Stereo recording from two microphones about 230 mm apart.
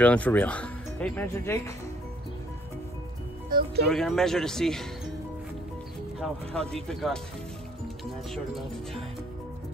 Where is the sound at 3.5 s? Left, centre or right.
Right.